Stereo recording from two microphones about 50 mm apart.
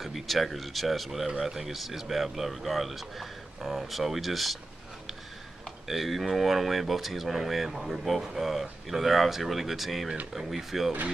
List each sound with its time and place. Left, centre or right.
0.0 s speech: centre
5.9 s speech: centre